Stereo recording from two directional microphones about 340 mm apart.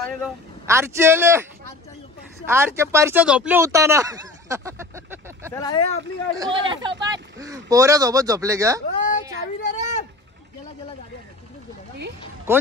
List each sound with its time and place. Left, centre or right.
0.0 s speech: centre
5.5 s speech: centre
6.3 s speech: centre
9.6 s a sound: left
12.5 s speech: centre